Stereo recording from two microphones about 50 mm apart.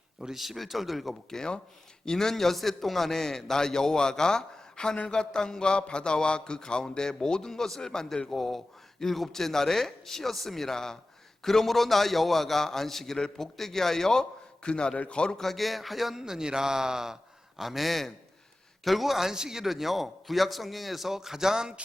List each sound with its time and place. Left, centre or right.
0.2 s a man's voice: centre
1.3 s a man's voice: centre
15.4 s a man's voice: centre